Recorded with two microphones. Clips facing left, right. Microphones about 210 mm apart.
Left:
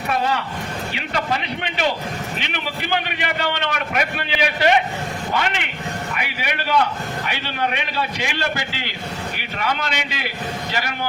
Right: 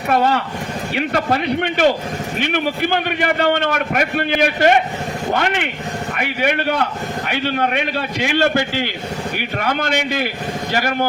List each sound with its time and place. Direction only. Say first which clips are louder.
0.1 s a man's voice: right 6 dB; 55° right (ahead or behind)